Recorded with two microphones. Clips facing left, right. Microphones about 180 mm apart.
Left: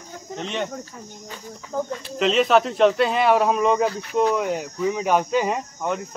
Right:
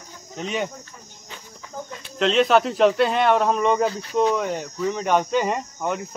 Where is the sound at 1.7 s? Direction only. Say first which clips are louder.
Left 9 dB; 60° left (ahead or behind).